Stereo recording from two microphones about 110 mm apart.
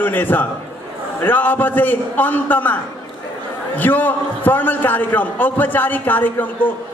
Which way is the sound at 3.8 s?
15° left (ahead or behind).